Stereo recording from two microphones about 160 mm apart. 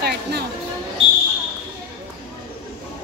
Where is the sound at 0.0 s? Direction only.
90° right.